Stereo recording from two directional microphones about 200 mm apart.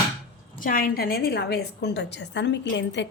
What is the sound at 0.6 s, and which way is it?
A woman's voice, 45° left (ahead or behind).